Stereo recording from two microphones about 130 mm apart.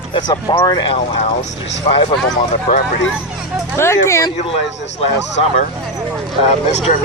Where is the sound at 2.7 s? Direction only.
40° left (ahead or behind).